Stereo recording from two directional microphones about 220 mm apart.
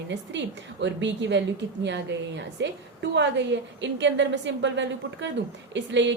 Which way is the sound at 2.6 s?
55° right (ahead or behind).